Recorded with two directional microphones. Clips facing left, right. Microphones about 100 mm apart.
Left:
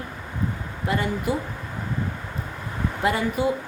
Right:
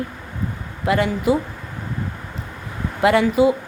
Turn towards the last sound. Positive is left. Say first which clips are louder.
# right 8 dB
turn(degrees=-85)